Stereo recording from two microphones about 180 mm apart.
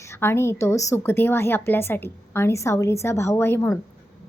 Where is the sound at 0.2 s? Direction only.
15° left (ahead or behind).